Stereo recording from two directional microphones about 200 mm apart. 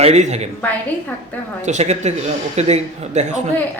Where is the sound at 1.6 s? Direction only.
35° right (ahead or behind).